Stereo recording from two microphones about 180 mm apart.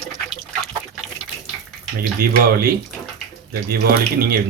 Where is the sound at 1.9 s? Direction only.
55° right (ahead or behind).